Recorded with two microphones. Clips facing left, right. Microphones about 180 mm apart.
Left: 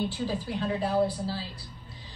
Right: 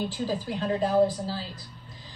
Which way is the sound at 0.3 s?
40° right (ahead or behind).